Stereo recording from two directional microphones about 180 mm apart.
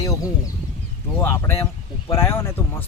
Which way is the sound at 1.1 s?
15° left (ahead or behind).